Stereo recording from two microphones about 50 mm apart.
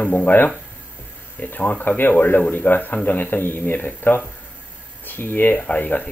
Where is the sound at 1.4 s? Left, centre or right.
Left.